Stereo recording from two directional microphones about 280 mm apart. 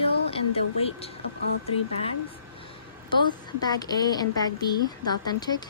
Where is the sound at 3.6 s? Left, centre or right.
Centre.